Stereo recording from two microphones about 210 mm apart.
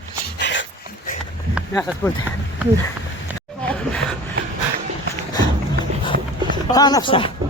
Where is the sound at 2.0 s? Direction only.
10° left (ahead or behind).